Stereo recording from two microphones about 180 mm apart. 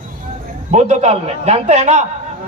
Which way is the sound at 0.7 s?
40° right (ahead or behind).